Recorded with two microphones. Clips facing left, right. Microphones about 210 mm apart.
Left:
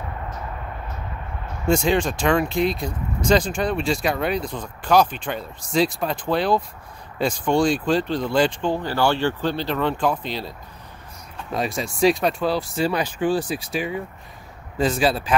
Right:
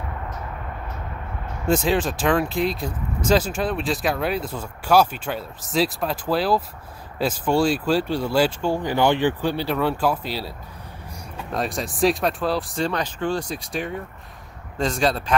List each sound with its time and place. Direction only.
1.7 s speech: 5° right (ahead or behind)
11.5 s speech: centre (ahead or behind)